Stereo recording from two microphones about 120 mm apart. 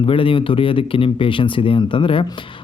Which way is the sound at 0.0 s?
45° left (ahead or behind).